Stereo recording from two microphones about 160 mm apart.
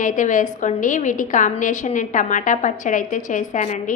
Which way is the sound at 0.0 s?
55° left (ahead or behind).